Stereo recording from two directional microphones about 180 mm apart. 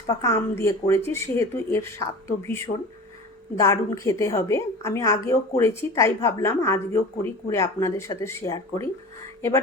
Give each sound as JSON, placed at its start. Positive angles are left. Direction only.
{"t": 0.1, "sound": "a woman's voice", "side_deg": 15}